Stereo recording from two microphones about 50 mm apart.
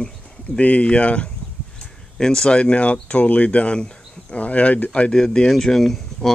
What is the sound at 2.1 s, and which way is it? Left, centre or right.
Speech, centre.